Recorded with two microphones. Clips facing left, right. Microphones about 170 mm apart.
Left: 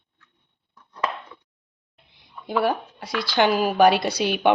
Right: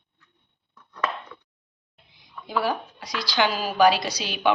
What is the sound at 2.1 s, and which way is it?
Speech, 55° left (ahead or behind).